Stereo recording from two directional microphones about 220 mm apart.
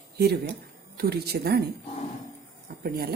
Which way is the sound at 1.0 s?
45° right (ahead or behind).